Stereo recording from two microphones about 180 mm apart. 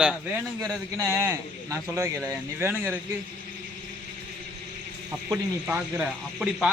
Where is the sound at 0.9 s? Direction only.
15° right (ahead or behind).